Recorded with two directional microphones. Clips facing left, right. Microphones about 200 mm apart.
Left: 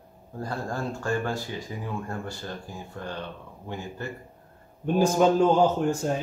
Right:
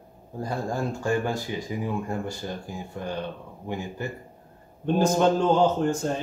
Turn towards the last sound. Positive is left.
turn(degrees=10)  # may be behind; listen again after turning